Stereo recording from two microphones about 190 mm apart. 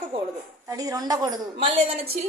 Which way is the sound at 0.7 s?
20° right (ahead or behind).